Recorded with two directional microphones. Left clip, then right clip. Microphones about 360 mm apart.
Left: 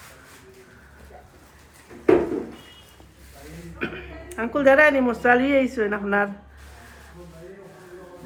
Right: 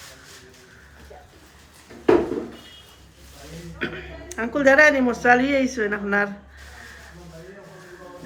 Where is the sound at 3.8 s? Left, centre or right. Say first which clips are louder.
Right 1 dB; centre.